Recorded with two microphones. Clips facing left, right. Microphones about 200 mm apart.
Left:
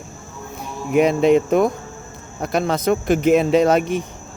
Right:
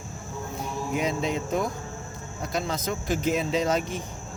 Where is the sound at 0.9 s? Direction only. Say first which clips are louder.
Left 14 dB; 65° left (ahead or behind).